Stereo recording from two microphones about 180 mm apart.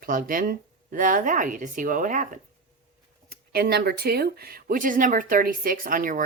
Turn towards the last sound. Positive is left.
turn(degrees=-50)  # may be behind; listen again after turning